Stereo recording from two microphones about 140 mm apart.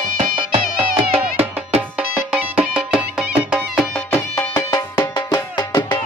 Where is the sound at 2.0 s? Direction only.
10° right (ahead or behind).